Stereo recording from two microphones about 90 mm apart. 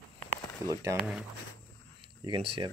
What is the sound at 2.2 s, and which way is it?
Speech, 80° right.